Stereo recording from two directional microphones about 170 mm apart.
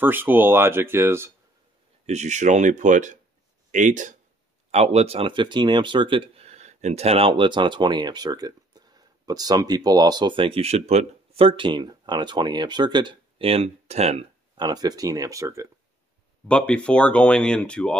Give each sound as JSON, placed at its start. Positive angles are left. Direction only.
{"t": 0.0, "sound": "speech", "side_deg": -10}
{"t": 2.0, "sound": "speech", "side_deg": -40}
{"t": 14.6, "sound": "speech", "side_deg": -25}
{"t": 16.4, "sound": "speech", "side_deg": 5}